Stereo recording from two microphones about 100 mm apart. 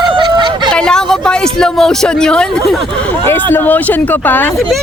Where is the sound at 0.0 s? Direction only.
50° right (ahead or behind).